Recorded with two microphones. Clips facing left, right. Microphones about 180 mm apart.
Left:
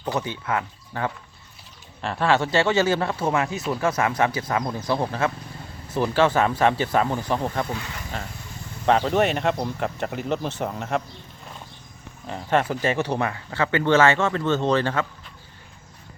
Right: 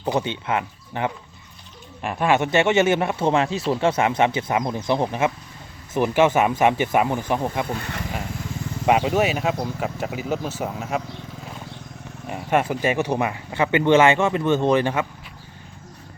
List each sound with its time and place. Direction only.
0.2 s speech: 20° right (ahead or behind)
8.9 s speech: 10° right (ahead or behind)
12.3 s speech: 10° right (ahead or behind)